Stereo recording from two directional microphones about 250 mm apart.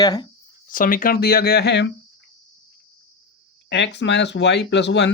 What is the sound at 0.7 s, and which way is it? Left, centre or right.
Speech, left.